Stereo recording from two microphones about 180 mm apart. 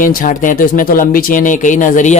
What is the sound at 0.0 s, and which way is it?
Speech, 50° left (ahead or behind).